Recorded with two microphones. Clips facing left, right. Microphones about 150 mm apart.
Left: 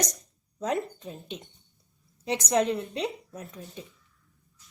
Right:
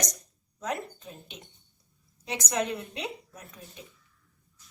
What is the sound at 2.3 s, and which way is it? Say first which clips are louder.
A woman's voice: left 5 dB; 30° left (ahead or behind).